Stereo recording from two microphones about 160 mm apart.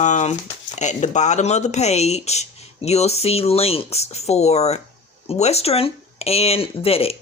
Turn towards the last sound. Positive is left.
turn(degrees=40)  # may be behind; listen again after turning